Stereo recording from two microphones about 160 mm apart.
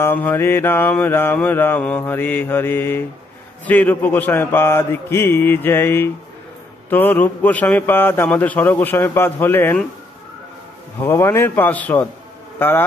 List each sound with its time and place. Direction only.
0.0 s a man's voice: 10° left (ahead or behind)
11.0 s a man's voice: 15° left (ahead or behind)